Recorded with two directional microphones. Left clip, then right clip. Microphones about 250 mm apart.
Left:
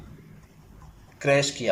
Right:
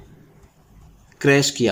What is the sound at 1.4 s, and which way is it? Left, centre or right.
Speech, right.